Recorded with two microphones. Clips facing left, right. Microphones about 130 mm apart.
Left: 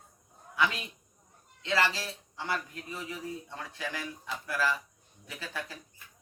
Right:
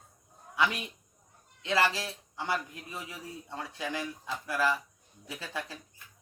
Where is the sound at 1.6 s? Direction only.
20° right (ahead or behind).